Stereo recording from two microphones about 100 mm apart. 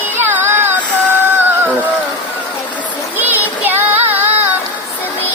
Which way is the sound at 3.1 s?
20° right (ahead or behind).